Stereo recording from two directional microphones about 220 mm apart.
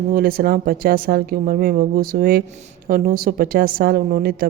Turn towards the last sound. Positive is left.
turn(degrees=-40)  # may be behind; listen again after turning